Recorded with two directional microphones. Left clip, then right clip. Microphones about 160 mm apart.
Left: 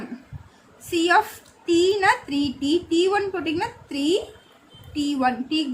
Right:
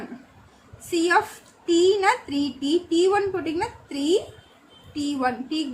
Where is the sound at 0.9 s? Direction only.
45° left (ahead or behind).